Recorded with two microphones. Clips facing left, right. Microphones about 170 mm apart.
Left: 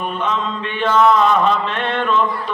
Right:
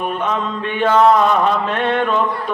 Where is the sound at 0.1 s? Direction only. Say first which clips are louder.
Right 1 dB; 50° right (ahead or behind).